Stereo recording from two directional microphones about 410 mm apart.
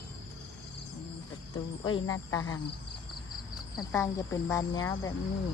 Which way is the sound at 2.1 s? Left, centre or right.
Centre.